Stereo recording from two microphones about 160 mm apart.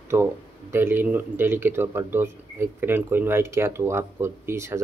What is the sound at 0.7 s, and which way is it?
Speech, 15° right (ahead or behind).